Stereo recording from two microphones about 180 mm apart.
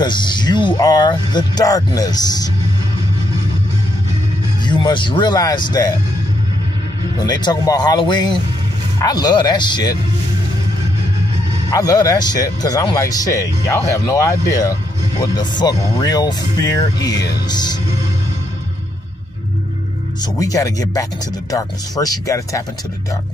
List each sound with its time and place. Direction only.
0.0 s speech: 25° left (ahead or behind)
4.6 s speech: 25° left (ahead or behind)
7.2 s speech: 25° left (ahead or behind)
11.7 s speech: 20° left (ahead or behind)
20.2 s speech: 20° left (ahead or behind)